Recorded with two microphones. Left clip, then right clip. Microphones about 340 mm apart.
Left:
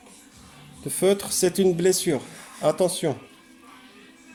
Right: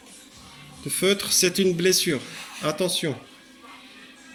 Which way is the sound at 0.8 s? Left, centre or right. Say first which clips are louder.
Left 1 dB; left.